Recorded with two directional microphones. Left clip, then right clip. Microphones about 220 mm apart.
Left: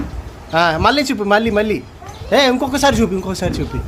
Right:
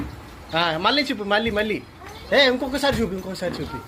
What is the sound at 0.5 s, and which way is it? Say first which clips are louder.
A man's voice: left 7 dB; 20° left (ahead or behind).